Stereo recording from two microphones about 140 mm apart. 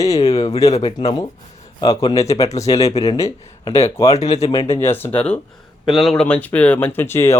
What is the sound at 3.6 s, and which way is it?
Speech, 45° left (ahead or behind).